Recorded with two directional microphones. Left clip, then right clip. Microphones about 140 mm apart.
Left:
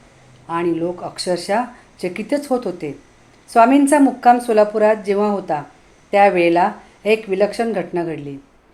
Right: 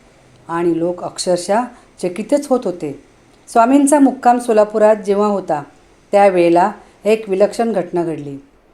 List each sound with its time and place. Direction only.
0.4 s speech: 25° right (ahead or behind)